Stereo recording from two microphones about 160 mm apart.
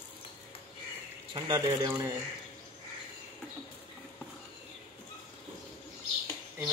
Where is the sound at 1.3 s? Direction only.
25° right (ahead or behind).